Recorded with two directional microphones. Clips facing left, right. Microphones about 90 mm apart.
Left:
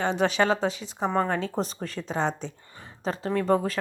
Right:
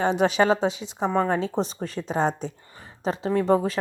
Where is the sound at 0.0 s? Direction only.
35° right (ahead or behind).